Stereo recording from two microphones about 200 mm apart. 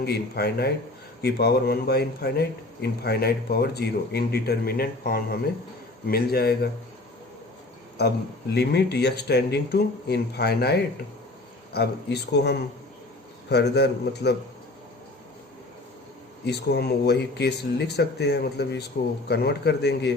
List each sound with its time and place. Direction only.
0.0 s a man's voice: 50° left (ahead or behind)
8.5 s speech: 55° left (ahead or behind)
16.5 s speech: 55° left (ahead or behind)